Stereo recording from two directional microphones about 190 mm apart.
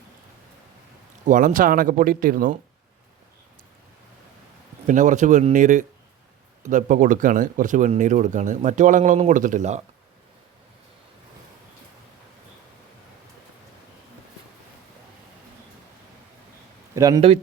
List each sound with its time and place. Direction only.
1.2 s speech: 40° right (ahead or behind)
4.9 s speech: 40° right (ahead or behind)
16.9 s speech: 15° right (ahead or behind)
17.2 s speech: 30° right (ahead or behind)